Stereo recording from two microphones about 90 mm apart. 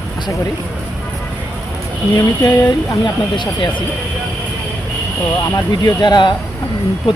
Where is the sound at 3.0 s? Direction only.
60° left (ahead or behind).